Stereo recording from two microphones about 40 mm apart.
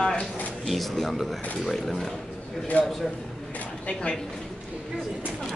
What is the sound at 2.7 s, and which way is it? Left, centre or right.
Speech, left.